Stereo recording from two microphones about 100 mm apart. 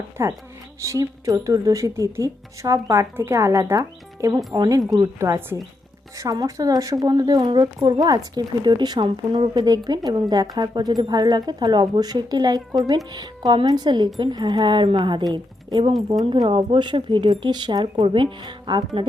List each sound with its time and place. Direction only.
0.2 s a woman's voice: 30° right (ahead or behind); by 9.5 s 50° right (ahead or behind)
9.6 s speech: 35° right (ahead or behind)